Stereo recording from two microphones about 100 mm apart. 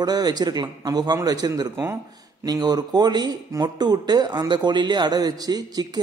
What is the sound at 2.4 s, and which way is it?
Speech, 40° right (ahead or behind).